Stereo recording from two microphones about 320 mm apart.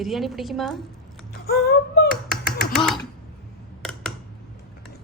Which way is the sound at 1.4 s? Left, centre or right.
Left.